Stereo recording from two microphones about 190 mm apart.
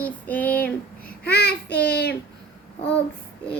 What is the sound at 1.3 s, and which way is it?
Child singing, 55° left (ahead or behind).